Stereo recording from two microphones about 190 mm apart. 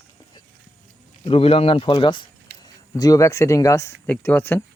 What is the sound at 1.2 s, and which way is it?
Speech, 30° left (ahead or behind).